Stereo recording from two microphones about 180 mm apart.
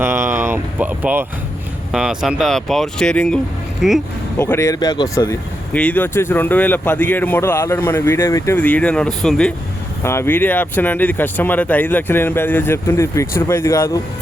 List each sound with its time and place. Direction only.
0.0 s a sound: 15° right (ahead or behind)
1.9 s speech: centre (ahead or behind)
4.4 s speech: 15° left (ahead or behind)
10.0 s speech: 15° left (ahead or behind)